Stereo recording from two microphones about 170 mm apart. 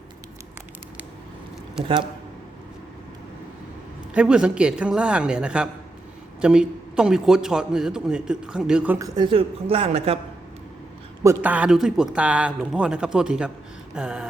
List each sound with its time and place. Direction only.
4.1 s a man's voice: 5° right (ahead or behind)
9.0 s a woman's voice: 25° right (ahead or behind)
11.2 s a man's voice: 15° right (ahead or behind)